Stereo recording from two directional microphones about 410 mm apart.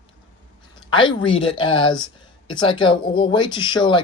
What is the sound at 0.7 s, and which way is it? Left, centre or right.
Speech, centre.